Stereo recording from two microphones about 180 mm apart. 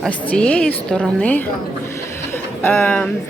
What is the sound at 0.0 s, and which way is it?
A woman's voice, 5° left (ahead or behind).